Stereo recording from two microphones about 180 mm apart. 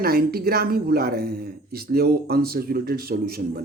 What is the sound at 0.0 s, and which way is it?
Speech, 60° right (ahead or behind).